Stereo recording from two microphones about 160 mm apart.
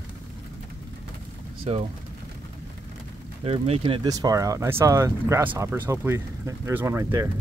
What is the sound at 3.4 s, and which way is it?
Speech, 40° right (ahead or behind).